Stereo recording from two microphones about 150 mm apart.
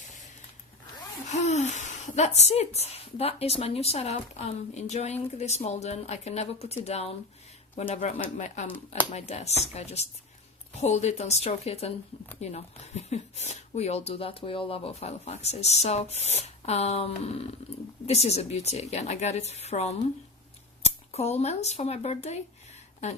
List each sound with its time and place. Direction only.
1.3 s speech: 50° left (ahead or behind)